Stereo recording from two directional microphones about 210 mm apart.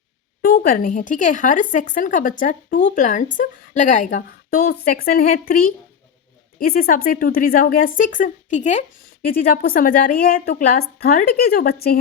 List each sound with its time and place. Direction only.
0.4 s a woman's voice: 45° left (ahead or behind)